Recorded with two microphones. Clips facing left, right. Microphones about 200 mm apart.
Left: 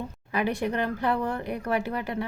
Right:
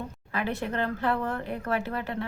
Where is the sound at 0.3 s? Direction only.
15° left (ahead or behind).